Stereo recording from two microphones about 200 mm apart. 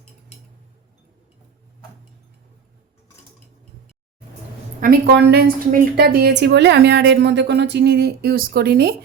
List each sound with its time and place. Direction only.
4.8 s a woman's voice: 50° right (ahead or behind)